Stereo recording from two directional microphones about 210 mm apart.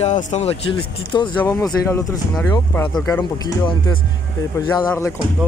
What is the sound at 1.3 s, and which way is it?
Speech, 10° left (ahead or behind).